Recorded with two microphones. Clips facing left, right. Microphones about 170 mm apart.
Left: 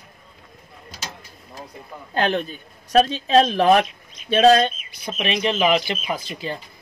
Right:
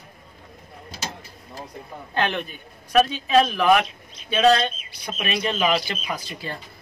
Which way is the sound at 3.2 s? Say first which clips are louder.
Left 2 dB; 35° left (ahead or behind).